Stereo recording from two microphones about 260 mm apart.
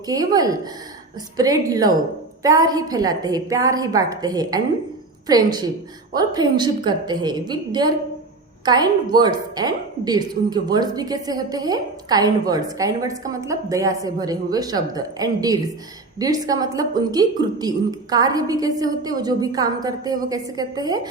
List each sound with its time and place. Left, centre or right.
0.1 s a woman's voice: centre